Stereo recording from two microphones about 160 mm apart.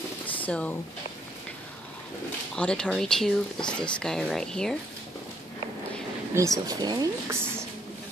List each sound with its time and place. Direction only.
0.4 s speech: 10° left (ahead or behind)
2.5 s speech: 5° left (ahead or behind)
6.3 s speech: 20° right (ahead or behind)